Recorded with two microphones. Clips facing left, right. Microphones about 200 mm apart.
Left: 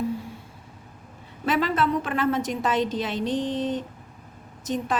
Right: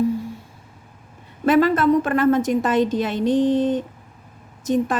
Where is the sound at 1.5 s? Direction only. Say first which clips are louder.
Right 8 dB; 50° right (ahead or behind).